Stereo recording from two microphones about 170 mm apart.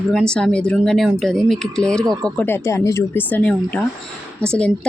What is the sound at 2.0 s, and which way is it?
Speech, 25° right (ahead or behind).